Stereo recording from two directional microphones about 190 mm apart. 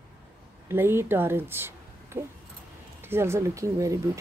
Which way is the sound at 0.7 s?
10° right (ahead or behind).